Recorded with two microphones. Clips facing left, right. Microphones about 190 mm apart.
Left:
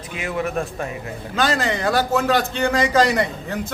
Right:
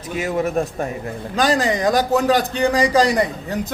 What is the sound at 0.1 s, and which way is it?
Speech, 40° right (ahead or behind).